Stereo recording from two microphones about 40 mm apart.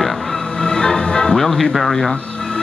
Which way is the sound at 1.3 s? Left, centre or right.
Centre.